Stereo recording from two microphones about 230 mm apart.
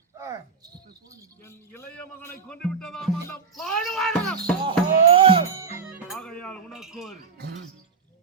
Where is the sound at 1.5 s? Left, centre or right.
Centre.